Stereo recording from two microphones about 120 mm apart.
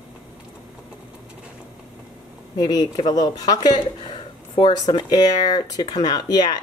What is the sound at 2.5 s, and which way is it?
Speech, 35° left (ahead or behind).